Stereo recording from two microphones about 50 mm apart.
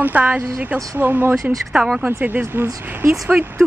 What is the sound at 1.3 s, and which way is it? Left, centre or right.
Speech, centre.